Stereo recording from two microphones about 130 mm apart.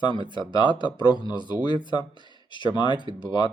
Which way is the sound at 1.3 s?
35° left (ahead or behind).